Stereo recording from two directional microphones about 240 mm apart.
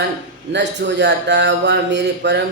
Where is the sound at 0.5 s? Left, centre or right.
Right.